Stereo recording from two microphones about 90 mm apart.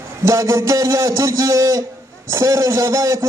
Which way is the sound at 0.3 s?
35° right (ahead or behind).